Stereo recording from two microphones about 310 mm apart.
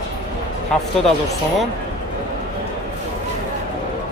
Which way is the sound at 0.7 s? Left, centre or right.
Centre.